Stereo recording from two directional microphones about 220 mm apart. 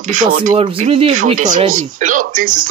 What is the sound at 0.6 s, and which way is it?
Speech, 25° right (ahead or behind).